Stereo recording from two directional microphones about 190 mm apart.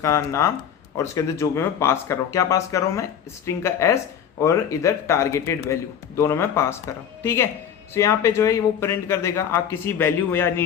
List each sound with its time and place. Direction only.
0.0 s a woman's voice: 15° left (ahead or behind)